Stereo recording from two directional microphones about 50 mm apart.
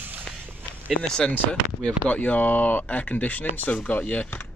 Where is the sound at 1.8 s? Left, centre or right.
Left.